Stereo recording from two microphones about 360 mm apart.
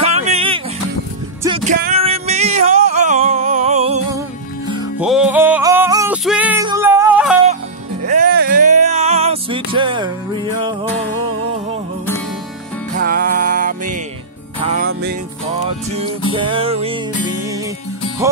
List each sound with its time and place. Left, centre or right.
0.0 s music: centre
8.0 s music: right
12.9 s music: right
16.3 s music: centre